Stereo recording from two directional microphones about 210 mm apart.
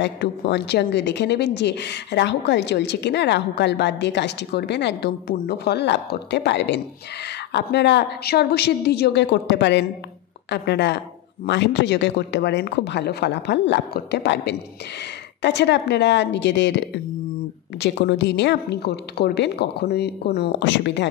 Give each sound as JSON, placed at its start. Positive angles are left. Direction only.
{"t": 0.0, "sound": "a woman's voice", "side_deg": 55}